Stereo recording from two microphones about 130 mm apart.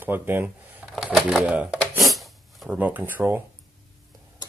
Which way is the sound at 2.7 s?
10° right (ahead or behind).